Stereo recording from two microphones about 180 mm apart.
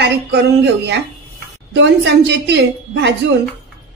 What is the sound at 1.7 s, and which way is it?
A woman's voice, 75° right (ahead or behind).